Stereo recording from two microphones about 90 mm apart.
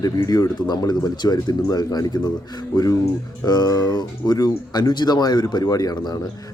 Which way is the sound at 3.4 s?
45° left (ahead or behind).